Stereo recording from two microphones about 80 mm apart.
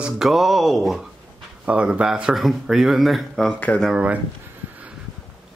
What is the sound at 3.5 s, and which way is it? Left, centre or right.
Speech, centre.